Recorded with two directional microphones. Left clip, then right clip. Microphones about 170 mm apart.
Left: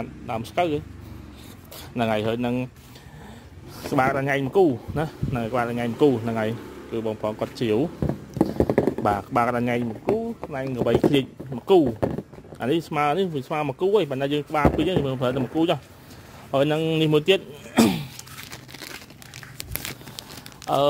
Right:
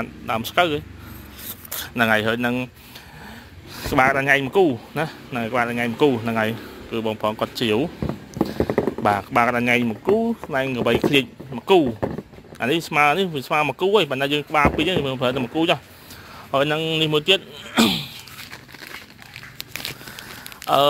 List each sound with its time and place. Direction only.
0.0 s a man's voice: 5° left (ahead or behind)
2.0 s speech: 15° left (ahead or behind)
3.7 s a sound: 15° left (ahead or behind)
4.0 s speech: 10° left (ahead or behind)
7.5 s a sound: 15° left (ahead or behind)
8.6 s clip-clop: 40° left (ahead or behind)
8.9 s speech: 15° left (ahead or behind)
11.1 s speech: 20° left (ahead or behind)
16.5 s a man's voice: 35° left (ahead or behind)